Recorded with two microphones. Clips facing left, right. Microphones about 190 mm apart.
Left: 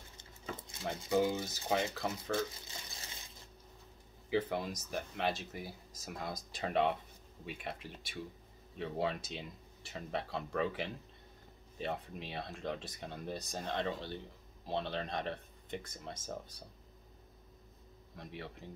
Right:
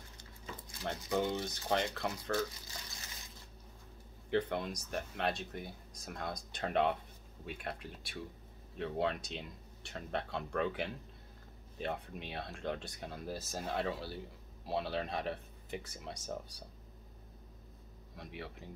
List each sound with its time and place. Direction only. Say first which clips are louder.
0.2 s a sound: left 4 dB; 20° left (ahead or behind)
1.1 s speech: left 3 dB; 5° left (ahead or behind)
2.3 s water: even; 25° left (ahead or behind)
4.3 s speech: even; centre (ahead or behind)
18.1 s speech: even; centre (ahead or behind)